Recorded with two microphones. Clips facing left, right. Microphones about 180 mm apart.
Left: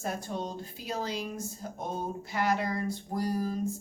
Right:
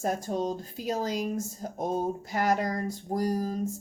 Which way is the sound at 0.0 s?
45° right (ahead or behind).